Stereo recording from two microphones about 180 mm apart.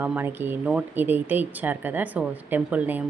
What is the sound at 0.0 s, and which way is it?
A woman's voice, 10° right (ahead or behind).